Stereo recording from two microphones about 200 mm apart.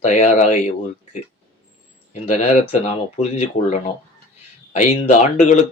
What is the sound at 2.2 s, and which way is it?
Speech, 35° left (ahead or behind).